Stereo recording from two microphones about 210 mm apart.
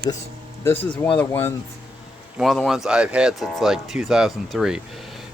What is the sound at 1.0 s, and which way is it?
Speech, 5° left (ahead or behind).